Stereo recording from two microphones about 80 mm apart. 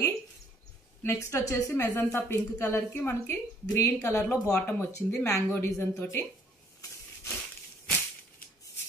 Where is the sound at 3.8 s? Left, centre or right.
Left.